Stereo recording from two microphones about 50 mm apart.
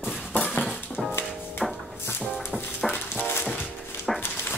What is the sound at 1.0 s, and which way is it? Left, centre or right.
Music, centre.